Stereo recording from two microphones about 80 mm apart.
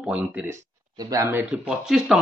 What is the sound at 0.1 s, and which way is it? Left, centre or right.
Speech, centre.